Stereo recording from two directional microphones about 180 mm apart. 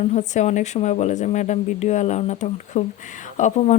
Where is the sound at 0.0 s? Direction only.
40° left (ahead or behind).